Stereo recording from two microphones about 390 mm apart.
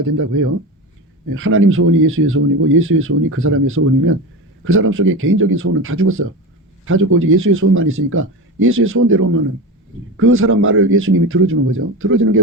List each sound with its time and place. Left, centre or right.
0.0 s speech: right